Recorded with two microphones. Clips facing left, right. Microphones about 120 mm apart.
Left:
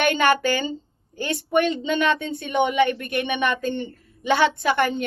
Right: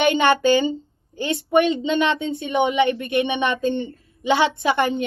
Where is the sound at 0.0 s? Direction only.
20° right (ahead or behind).